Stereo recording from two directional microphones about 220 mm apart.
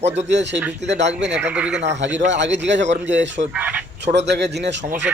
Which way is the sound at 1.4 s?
5° right (ahead or behind).